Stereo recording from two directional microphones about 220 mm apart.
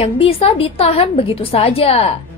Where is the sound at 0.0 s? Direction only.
25° left (ahead or behind).